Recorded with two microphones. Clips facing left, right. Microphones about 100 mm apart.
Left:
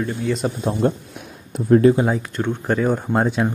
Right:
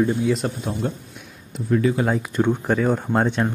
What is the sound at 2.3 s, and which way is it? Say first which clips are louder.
Speech: right 2 dB; 10° right (ahead or behind).